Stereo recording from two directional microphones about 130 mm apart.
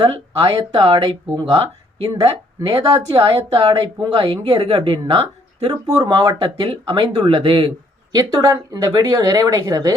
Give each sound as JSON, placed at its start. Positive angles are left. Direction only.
{"t": 0.0, "sound": "a woman's voice", "side_deg": -40}